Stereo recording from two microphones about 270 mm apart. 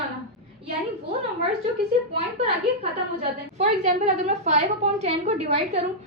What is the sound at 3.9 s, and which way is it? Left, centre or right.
A woman's voice, right.